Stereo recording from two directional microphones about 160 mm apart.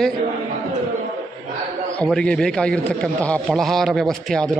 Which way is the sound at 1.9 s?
5° left (ahead or behind).